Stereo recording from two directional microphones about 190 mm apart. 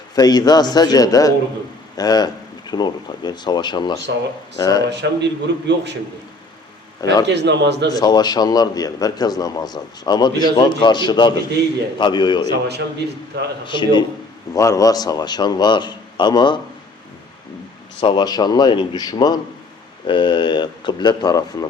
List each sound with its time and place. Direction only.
0.2 s a man's voice: 20° left (ahead or behind)
4.9 s speech: 65° right (ahead or behind)
7.0 s a man's voice: 20° left (ahead or behind)
7.3 s speech: 65° right (ahead or behind)
7.9 s a man's voice: 20° left (ahead or behind)
12.5 s speech: 60° right (ahead or behind)
13.7 s a man's voice: 25° left (ahead or behind)
18.0 s a man's voice: 25° left (ahead or behind)